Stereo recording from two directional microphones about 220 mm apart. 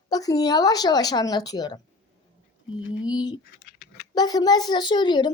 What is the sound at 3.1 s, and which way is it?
A child's voice, 20° left (ahead or behind).